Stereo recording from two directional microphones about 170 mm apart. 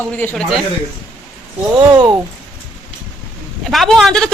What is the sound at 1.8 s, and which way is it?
Speech, 25° right (ahead or behind).